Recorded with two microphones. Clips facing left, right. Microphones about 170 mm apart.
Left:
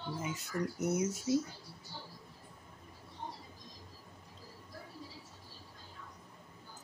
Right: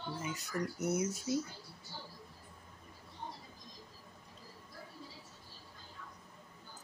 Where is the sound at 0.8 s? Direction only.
25° left (ahead or behind).